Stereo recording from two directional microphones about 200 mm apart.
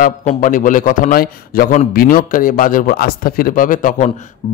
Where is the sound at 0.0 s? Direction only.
40° left (ahead or behind).